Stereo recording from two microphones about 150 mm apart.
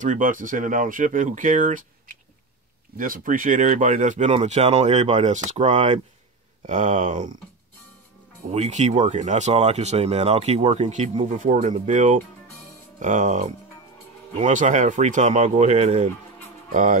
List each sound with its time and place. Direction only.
0.0 s speech: 60° right (ahead or behind)
8.5 s speech: 45° right (ahead or behind)